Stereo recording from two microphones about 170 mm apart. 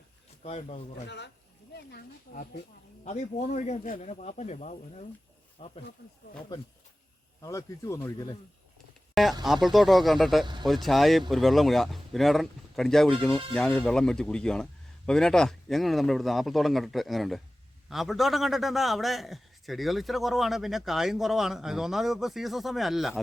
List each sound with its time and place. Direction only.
0.4 s speech: 40° left (ahead or behind)
1.0 s speech: 90° left
2.3 s speech: 60° left (ahead or behind)
3.0 s speech: 45° left (ahead or behind)
7.4 s speech: 20° left (ahead or behind)
9.4 s speech: centre (ahead or behind)
10.4 s speech: 25° right (ahead or behind)
10.7 s speech: centre (ahead or behind)